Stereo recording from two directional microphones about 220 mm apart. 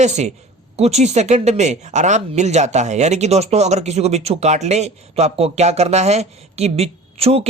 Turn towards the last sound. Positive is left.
turn(degrees=-25)  # may be behind; listen again after turning